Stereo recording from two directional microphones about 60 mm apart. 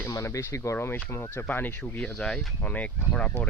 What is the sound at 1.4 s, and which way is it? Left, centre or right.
Speech, left.